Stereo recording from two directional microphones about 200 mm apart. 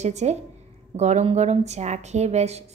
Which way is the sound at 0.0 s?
35° right (ahead or behind).